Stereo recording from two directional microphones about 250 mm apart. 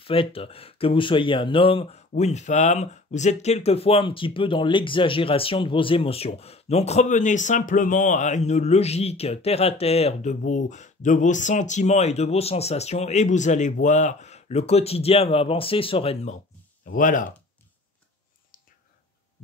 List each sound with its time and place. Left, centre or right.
0.0 s speech: left